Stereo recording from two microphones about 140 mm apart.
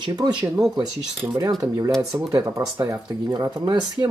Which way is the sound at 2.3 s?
20° right (ahead or behind).